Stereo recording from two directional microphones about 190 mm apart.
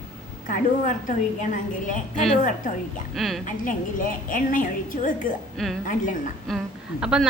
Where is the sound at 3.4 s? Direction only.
45° left (ahead or behind).